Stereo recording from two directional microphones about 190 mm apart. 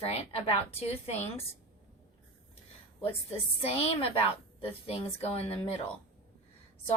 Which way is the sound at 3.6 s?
30° left (ahead or behind).